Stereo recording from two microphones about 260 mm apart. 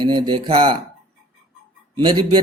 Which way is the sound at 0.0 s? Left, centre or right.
Centre.